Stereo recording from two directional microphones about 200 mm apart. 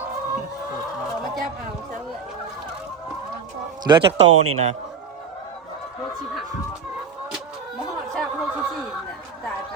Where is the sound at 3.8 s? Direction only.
20° right (ahead or behind).